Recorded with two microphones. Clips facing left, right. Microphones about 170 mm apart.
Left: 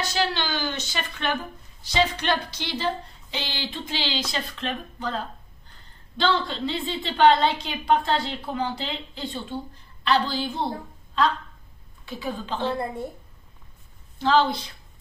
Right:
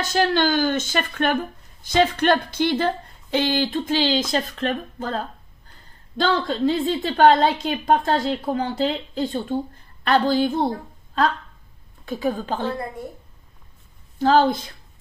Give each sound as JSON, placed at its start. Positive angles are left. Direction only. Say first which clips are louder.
{"t": 0.0, "sound": "speech", "louder": "right 7 dB", "side_deg": -50}
{"t": 12.1, "sound": "speech", "louder": "right 6 dB", "side_deg": -45}
{"t": 14.1, "sound": "speech", "louder": "right 4 dB", "side_deg": -45}